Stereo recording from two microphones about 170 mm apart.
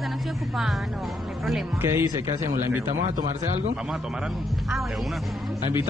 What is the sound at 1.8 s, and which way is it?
Speech, 15° right (ahead or behind).